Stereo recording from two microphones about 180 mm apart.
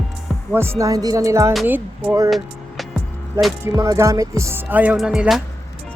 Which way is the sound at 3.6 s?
15° right (ahead or behind).